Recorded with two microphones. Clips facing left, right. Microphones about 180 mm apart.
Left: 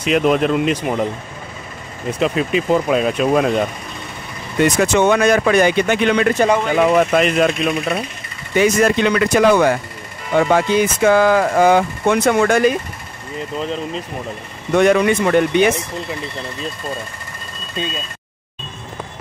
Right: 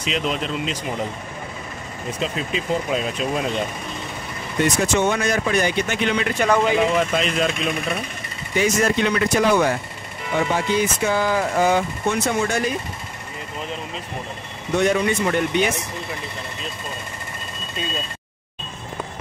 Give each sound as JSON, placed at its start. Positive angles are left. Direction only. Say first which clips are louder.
{"t": 0.0, "sound": "speech", "louder": "left 9 dB", "side_deg": 55}
{"t": 2.1, "sound": "speech", "louder": "left 9 dB", "side_deg": 65}
{"t": 4.7, "sound": "speech", "louder": "left 8 dB", "side_deg": 65}
{"t": 8.5, "sound": "speech", "louder": "left 5 dB", "side_deg": 70}
{"t": 14.7, "sound": "speech", "louder": "left 6 dB", "side_deg": 90}